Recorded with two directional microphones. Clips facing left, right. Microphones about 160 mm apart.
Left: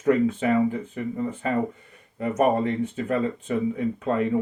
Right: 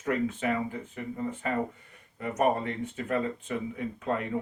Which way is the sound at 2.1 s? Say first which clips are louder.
Left 5 dB; 25° left (ahead or behind).